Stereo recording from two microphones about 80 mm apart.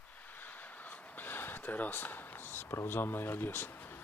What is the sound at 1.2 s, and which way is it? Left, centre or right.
Speech, left.